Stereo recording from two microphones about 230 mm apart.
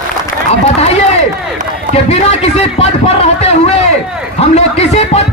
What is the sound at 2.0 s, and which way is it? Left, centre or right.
Speech, left.